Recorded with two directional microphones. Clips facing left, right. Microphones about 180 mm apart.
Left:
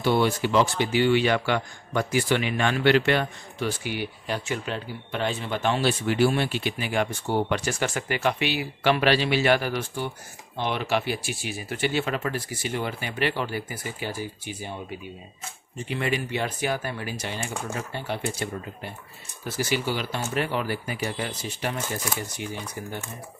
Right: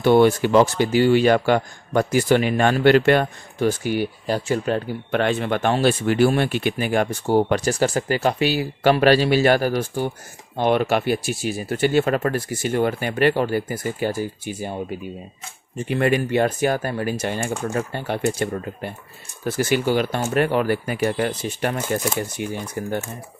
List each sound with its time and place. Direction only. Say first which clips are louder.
0.0 s speech: right 8 dB; 55° right (ahead or behind)
5.1 s speech: right 7 dB; 65° right (ahead or behind); by 14.8 s 45° right (ahead or behind)
15.9 s speech: right 8 dB; 50° right (ahead or behind)